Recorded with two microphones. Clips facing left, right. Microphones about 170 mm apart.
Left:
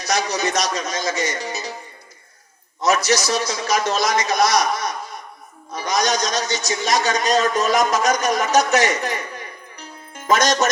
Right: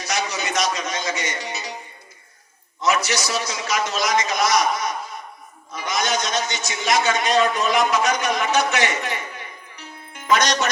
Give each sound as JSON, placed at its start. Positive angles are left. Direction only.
{"t": 0.0, "sound": "a man's voice", "side_deg": 40}
{"t": 2.8, "sound": "a man's voice", "side_deg": 40}